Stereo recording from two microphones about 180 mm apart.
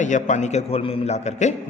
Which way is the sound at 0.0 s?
45° left (ahead or behind).